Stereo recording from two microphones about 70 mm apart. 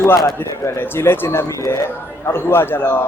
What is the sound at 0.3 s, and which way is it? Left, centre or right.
Speech, left.